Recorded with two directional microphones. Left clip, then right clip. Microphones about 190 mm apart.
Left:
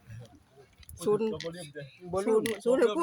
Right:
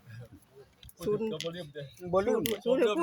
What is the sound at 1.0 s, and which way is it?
Speech, 40° left (ahead or behind).